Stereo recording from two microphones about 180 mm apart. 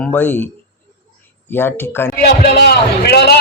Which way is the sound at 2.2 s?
65° left (ahead or behind).